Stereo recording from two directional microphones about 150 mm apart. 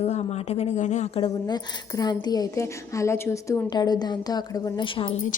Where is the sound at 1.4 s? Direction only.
25° left (ahead or behind).